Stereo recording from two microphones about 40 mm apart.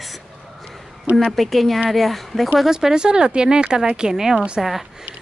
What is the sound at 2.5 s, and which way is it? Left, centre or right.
A woman's voice, centre.